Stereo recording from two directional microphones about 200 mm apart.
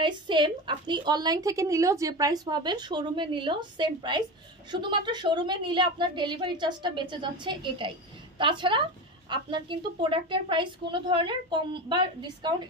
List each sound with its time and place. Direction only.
0.0 s a woman's voice: 25° right (ahead or behind)